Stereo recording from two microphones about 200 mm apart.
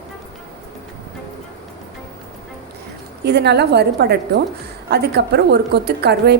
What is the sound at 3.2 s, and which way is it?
A woman's voice, 55° right (ahead or behind).